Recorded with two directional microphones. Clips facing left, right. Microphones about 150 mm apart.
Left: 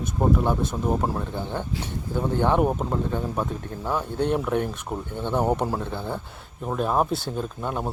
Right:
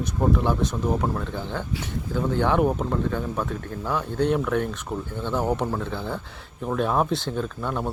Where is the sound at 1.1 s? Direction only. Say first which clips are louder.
Left 1 dB; 15° left (ahead or behind).